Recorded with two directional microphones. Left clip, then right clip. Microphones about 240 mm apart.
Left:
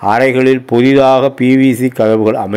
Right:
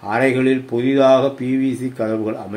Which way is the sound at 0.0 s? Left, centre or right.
Left.